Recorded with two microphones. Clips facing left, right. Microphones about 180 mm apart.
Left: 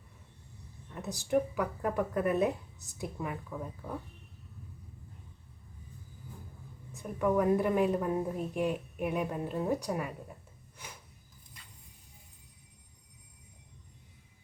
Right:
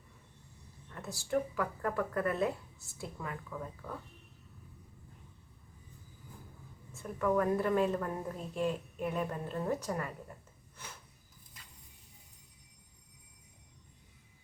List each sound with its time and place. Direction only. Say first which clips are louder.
0.9 s a woman's voice: left 4 dB; 15° left (ahead or behind)
6.9 s a woman's voice: left 2 dB; 15° left (ahead or behind)
10.8 s a sound: left 1 dB; 15° left (ahead or behind)